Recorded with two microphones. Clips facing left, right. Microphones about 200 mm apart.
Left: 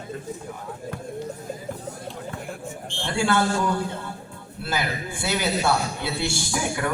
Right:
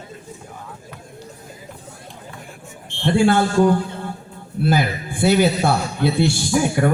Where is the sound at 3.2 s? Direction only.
50° right (ahead or behind).